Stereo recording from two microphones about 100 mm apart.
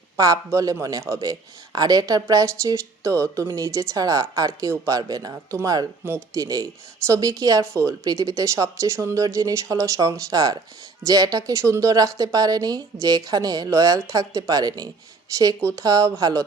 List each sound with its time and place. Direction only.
0.2 s a man's voice: 35° right (ahead or behind)